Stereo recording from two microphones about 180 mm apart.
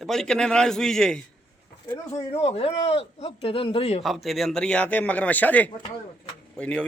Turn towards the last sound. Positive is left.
turn(degrees=5)  # may be behind; listen again after turning